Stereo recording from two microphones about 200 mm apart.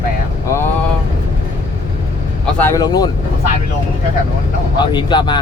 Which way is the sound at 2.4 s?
10° left (ahead or behind).